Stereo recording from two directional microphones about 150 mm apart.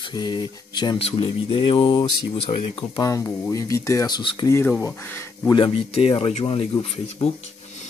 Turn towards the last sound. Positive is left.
turn(degrees=35)  # may be behind; listen again after turning